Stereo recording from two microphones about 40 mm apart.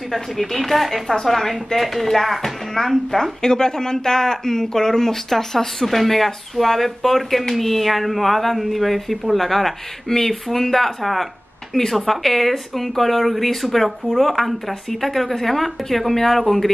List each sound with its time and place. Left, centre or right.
0.1 s speech: centre